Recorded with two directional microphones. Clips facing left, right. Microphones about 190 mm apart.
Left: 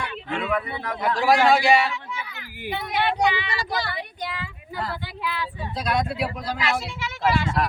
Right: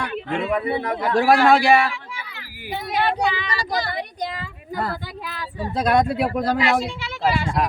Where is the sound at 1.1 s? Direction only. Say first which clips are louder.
Right 3 dB; 55° right (ahead or behind).